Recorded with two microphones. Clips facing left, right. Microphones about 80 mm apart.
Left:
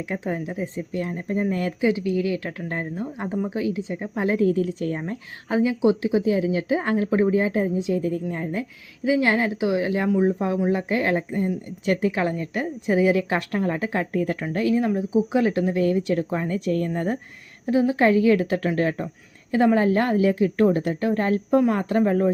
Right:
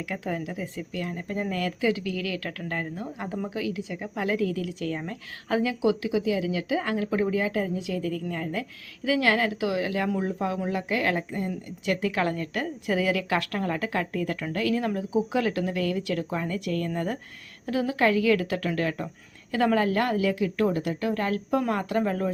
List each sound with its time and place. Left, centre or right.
0.1 s speech: left